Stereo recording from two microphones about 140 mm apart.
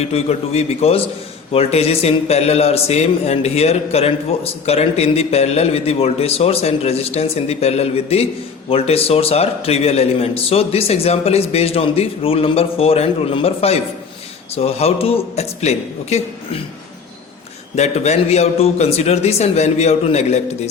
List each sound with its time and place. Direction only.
0.0 s speech: 50° left (ahead or behind)
17.7 s speech: 50° left (ahead or behind)